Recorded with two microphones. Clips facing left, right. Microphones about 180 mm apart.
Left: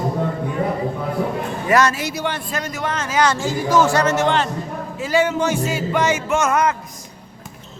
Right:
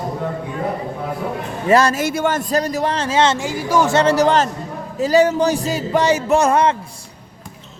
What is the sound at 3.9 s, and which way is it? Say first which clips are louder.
Speech: right 3 dB; 30° right (ahead or behind).